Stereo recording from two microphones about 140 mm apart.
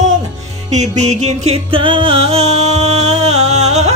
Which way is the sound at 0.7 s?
55° right (ahead or behind).